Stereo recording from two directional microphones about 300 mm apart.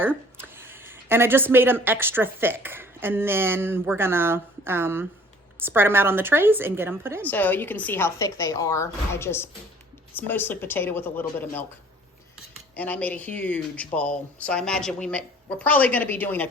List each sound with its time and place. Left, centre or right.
0.0 s a woman's voice: centre
7.3 s a woman's voice: centre
12.7 s speech: centre